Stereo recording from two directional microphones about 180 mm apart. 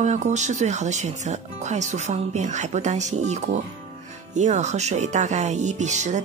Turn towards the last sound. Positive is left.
turn(degrees=-40)  # may be behind; listen again after turning